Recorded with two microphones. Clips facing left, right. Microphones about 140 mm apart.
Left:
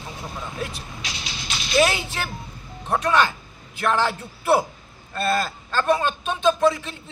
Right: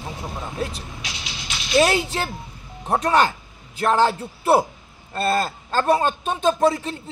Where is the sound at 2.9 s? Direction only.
40° right (ahead or behind).